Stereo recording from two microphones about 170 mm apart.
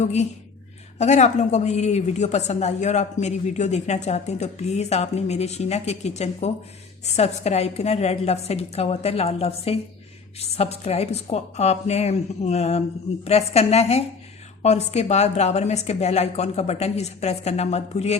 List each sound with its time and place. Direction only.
0.0 s a woman's voice: 40° left (ahead or behind)